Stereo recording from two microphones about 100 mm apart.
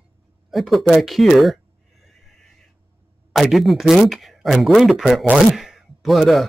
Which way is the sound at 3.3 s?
Centre (ahead or behind).